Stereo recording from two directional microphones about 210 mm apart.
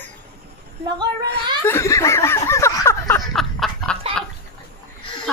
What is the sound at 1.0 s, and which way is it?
Speech, 20° right (ahead or behind).